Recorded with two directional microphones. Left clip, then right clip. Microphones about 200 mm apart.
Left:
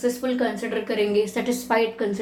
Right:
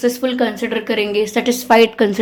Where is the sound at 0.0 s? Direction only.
50° right (ahead or behind).